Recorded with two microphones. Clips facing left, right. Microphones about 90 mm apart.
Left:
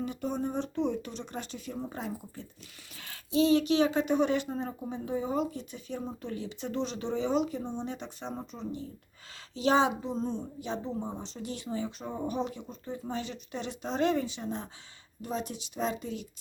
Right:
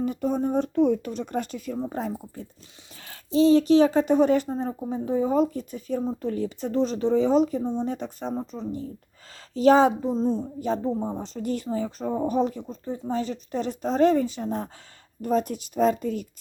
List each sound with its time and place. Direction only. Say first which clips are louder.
0.0 s a woman's voice: right 7 dB; 40° right (ahead or behind)